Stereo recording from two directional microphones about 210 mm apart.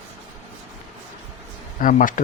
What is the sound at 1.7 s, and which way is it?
Speech, 40° left (ahead or behind).